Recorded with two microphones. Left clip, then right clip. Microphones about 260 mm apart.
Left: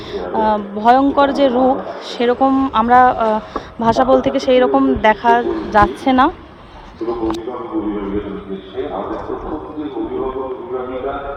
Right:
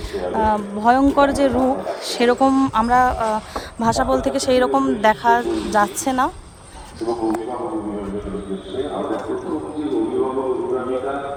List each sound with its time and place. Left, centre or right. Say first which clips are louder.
0.1 s speech: left 3 dB; right
4.8 s speech: left 4 dB; centre
5.0 s speech: left 2 dB; right